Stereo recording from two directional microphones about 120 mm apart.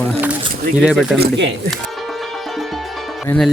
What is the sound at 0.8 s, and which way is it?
Speech, centre (ahead or behind).